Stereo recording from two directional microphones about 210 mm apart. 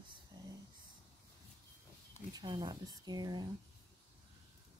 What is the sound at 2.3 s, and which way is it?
Speech, 20° right (ahead or behind).